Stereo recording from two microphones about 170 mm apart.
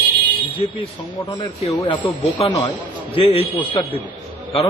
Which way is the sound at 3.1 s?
35° left (ahead or behind).